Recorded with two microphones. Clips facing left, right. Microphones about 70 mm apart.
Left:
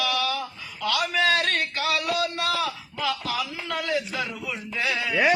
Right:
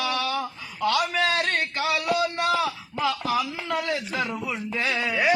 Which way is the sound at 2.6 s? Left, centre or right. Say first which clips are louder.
Right 2 dB; right.